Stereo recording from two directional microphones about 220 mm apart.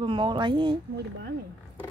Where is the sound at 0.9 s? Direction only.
50° right (ahead or behind).